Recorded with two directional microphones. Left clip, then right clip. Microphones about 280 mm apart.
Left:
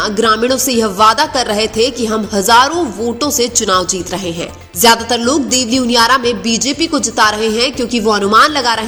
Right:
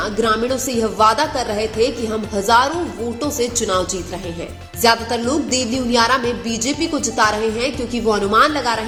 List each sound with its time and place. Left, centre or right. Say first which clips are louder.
0.0 s music: left 6 dB; left